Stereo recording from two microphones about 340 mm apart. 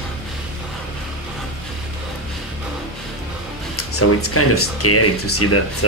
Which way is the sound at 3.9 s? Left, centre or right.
Left.